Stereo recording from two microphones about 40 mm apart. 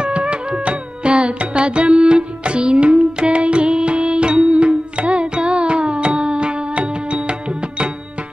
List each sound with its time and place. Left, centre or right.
0.0 s music: right